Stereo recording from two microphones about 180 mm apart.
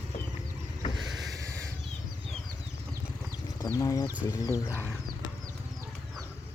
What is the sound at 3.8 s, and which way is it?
Speech, 20° left (ahead or behind).